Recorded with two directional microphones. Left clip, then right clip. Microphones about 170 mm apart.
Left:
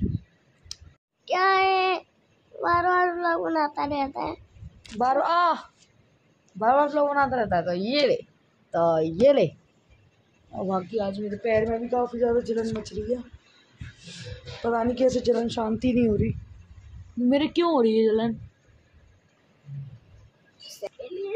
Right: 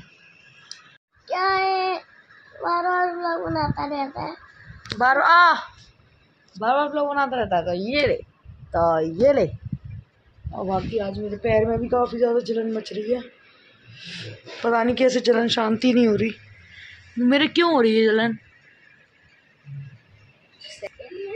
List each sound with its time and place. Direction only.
1.2 s child singing: 5° left (ahead or behind)
2.6 s speech: 5° left (ahead or behind)
6.6 s a woman's voice: centre (ahead or behind)
10.5 s speech: 10° right (ahead or behind)
11.4 s speech: 25° right (ahead or behind)
12.2 s speech: 5° right (ahead or behind)
13.9 s a sound: 10° right (ahead or behind)
14.7 s a woman's voice: 5° right (ahead or behind)
20.6 s a sound: 35° left (ahead or behind)